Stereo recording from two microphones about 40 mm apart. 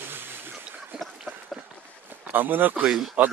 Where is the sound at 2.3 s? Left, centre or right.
Right.